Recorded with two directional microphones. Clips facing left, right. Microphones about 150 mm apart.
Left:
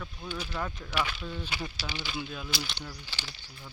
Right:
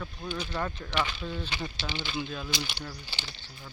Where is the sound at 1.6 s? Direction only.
25° right (ahead or behind).